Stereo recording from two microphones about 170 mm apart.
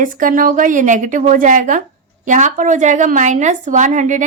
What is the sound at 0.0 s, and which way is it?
A woman's voice, 50° right (ahead or behind).